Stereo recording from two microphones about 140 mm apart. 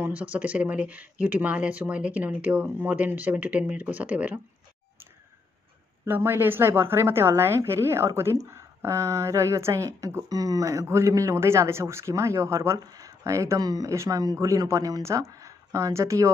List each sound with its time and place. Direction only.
0.0 s speech: 10° right (ahead or behind)
6.0 s a woman's voice: 15° right (ahead or behind)